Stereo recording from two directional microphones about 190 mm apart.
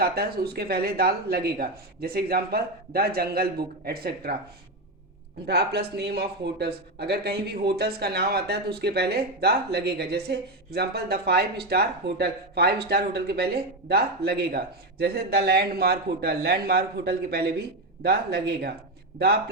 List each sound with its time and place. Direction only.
0.0 s speech: 55° right (ahead or behind)
5.5 s speech: 60° right (ahead or behind)